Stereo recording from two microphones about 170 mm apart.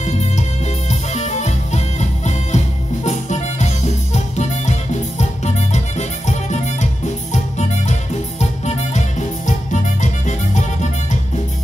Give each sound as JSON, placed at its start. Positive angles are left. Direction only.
{"t": 0.0, "sound": "music", "side_deg": 40}
{"t": 8.4, "sound": "music", "side_deg": 40}